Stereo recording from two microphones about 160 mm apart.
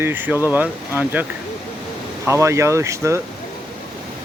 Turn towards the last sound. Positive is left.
turn(degrees=-20)  # may be behind; listen again after turning